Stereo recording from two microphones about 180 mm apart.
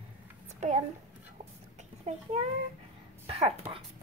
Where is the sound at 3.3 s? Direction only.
35° right (ahead or behind).